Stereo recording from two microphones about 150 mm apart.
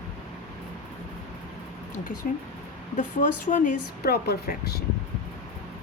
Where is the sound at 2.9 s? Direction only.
60° left (ahead or behind); by 4.8 s 90° left.